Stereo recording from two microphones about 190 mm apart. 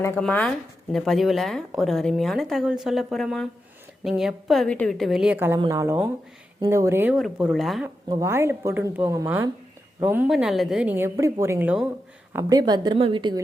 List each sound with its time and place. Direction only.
0.2 s a woman's voice: 5° left (ahead or behind)
8.0 s a woman's voice: 15° right (ahead or behind)
10.2 s a woman's voice: centre (ahead or behind)
12.3 s a woman's voice: 15° right (ahead or behind)